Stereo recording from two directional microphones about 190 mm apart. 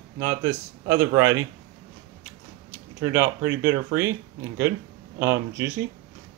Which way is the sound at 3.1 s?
15° right (ahead or behind).